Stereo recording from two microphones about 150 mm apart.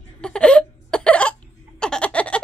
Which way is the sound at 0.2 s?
5° left (ahead or behind).